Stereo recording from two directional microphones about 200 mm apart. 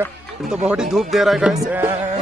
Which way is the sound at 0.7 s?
Centre (ahead or behind).